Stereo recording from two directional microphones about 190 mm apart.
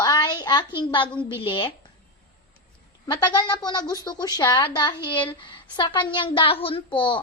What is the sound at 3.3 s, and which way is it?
A child's voice, 20° left (ahead or behind).